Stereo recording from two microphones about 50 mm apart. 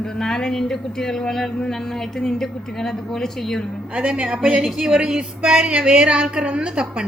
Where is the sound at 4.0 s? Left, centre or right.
Right.